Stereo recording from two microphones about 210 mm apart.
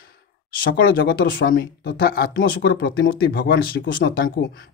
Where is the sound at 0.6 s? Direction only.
45° left (ahead or behind).